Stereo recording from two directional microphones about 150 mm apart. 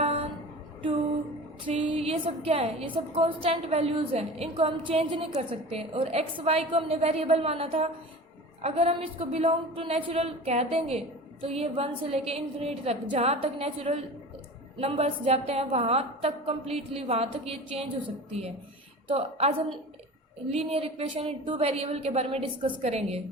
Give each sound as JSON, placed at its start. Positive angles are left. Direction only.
{"t": 0.0, "sound": "a sound", "side_deg": -40}
{"t": 1.6, "sound": "a woman's voice", "side_deg": -35}
{"t": 19.0, "sound": "a woman's voice", "side_deg": -40}